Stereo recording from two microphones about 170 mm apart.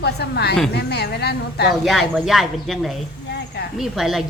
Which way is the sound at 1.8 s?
Centre (ahead or behind).